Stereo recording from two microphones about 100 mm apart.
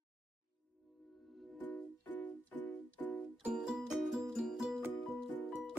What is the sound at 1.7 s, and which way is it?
Music, 15° left (ahead or behind).